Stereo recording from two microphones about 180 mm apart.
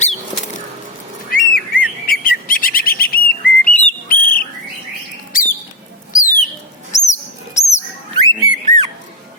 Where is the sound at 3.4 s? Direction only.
10° left (ahead or behind).